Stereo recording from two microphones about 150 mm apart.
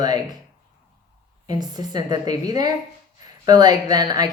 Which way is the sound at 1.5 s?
25° right (ahead or behind).